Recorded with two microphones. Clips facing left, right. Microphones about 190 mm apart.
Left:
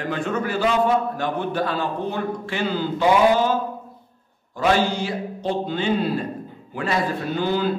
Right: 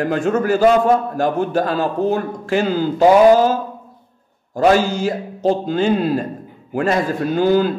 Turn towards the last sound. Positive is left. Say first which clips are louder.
# right 7 dB
turn(degrees=-45)  # may be behind; listen again after turning